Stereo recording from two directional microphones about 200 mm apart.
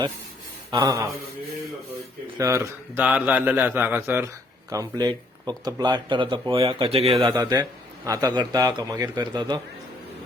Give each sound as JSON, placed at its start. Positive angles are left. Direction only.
{"t": 0.7, "sound": "a man's voice", "side_deg": -15}
{"t": 2.4, "sound": "a man's voice", "side_deg": -15}